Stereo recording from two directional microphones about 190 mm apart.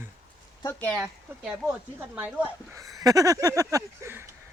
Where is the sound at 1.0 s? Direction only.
5° right (ahead or behind).